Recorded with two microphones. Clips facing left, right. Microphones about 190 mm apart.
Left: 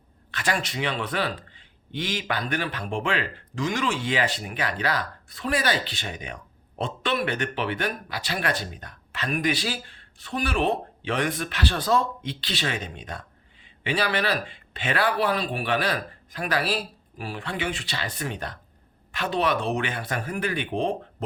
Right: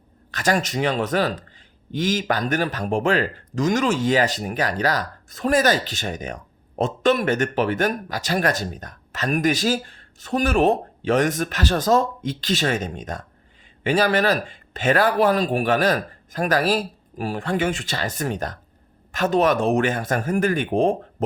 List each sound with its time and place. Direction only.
0.3 s speech: 40° right (ahead or behind)